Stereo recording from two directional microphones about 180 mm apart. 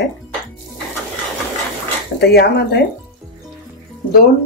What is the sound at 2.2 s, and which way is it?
Speech, 60° left (ahead or behind).